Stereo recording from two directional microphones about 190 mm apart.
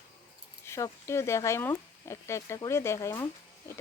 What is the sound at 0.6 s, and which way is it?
Speech, 15° left (ahead or behind).